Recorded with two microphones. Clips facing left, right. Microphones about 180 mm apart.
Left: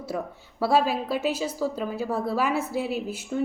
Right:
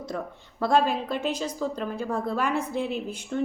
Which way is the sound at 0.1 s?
5° left (ahead or behind).